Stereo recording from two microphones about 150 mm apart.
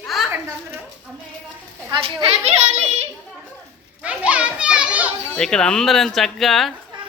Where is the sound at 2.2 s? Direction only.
40° right (ahead or behind).